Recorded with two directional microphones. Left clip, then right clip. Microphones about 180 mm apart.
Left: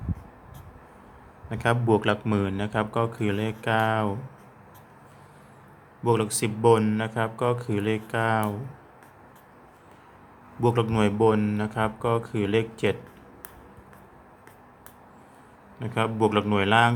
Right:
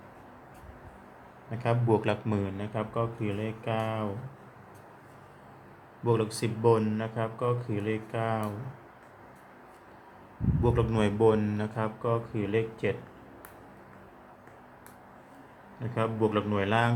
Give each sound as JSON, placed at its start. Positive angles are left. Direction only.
{"t": 1.5, "sound": "speech", "side_deg": 40}
{"t": 2.0, "sound": "speech", "side_deg": 25}
{"t": 2.5, "sound": "speech", "side_deg": 45}
{"t": 6.1, "sound": "speech", "side_deg": 35}
{"t": 10.6, "sound": "speech", "side_deg": 30}
{"t": 15.8, "sound": "speech", "side_deg": 40}